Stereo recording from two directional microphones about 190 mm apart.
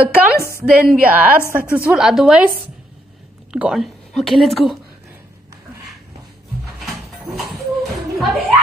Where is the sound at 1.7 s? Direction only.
5° right (ahead or behind).